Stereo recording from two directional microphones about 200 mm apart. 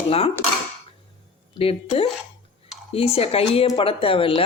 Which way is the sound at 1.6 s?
30° left (ahead or behind).